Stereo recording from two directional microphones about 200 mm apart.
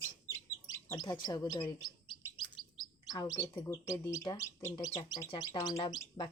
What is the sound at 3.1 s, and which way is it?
Speech, 20° left (ahead or behind).